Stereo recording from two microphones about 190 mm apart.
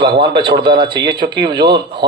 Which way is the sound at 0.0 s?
25° right (ahead or behind).